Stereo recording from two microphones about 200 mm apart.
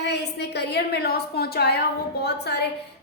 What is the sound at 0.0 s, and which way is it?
A woman's voice, 55° left (ahead or behind).